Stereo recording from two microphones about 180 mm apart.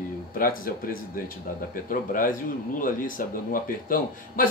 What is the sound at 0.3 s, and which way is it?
A man's voice, 55° left (ahead or behind).